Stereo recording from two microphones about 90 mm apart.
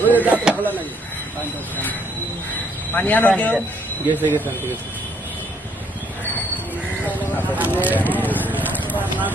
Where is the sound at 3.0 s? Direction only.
20° left (ahead or behind).